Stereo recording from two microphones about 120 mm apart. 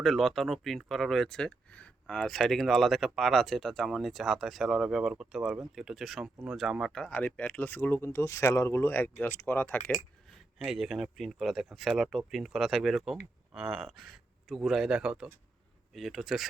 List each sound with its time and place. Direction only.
0.0 s speech: centre (ahead or behind)
10.6 s speech: 5° right (ahead or behind)